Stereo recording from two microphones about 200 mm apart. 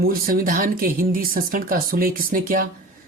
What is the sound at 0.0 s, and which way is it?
A woman's voice, 45° right (ahead or behind).